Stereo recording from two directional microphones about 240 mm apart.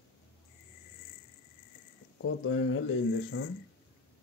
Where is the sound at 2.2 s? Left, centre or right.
Left.